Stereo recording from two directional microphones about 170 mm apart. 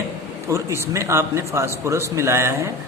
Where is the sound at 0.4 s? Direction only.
15° right (ahead or behind).